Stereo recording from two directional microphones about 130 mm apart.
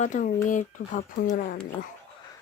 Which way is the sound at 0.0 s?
75° left (ahead or behind).